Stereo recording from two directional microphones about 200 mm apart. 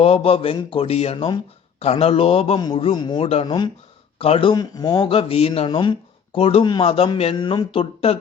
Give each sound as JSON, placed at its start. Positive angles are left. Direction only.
{"t": 0.0, "sound": "speech", "side_deg": 30}